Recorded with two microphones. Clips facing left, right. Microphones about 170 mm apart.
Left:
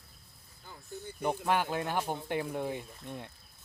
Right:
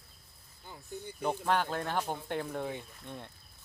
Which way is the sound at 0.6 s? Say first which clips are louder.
Right 1 dB; 15° right (ahead or behind).